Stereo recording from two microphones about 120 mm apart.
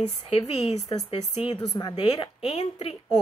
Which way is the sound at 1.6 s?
30° left (ahead or behind).